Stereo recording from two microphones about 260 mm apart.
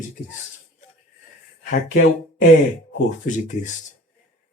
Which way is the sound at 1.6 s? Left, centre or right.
Left.